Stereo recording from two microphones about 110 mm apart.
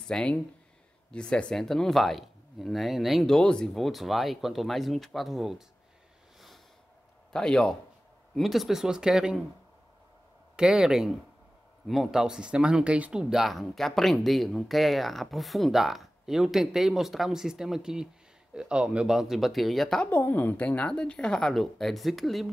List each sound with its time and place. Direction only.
0.0 s speech: 10° left (ahead or behind)
7.3 s a woman's voice: 5° left (ahead or behind)
10.5 s speech: 5° right (ahead or behind)
20.1 s a woman's voice: 15° left (ahead or behind); by 22.5 s centre (ahead or behind)